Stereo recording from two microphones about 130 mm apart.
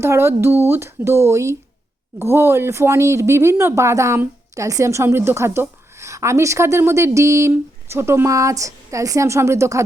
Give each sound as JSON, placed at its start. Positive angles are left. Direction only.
{"t": 0.0, "sound": "speech", "side_deg": -20}